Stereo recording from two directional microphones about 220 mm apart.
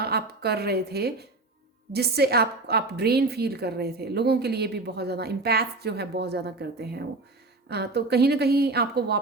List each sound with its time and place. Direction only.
0.0 s a woman's voice: 45° right (ahead or behind)